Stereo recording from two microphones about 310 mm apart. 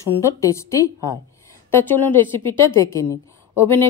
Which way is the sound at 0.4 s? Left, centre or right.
Centre.